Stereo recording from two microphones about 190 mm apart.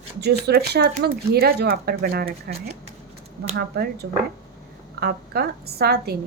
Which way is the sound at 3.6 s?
55° right (ahead or behind).